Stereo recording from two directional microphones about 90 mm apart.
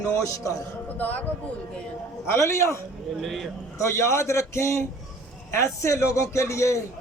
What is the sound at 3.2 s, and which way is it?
Speech, 5° left (ahead or behind).